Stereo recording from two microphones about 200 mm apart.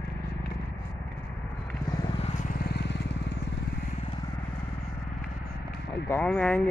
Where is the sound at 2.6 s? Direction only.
55° left (ahead or behind).